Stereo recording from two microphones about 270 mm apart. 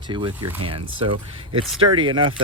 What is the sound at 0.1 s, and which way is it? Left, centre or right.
Speech, centre.